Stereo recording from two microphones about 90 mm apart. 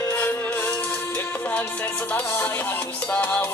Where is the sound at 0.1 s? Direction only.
20° left (ahead or behind).